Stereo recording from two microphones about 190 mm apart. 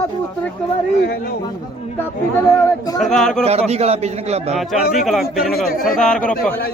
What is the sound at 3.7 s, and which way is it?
Speech, 35° right (ahead or behind).